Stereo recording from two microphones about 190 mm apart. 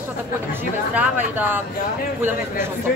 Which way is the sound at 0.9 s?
10° right (ahead or behind).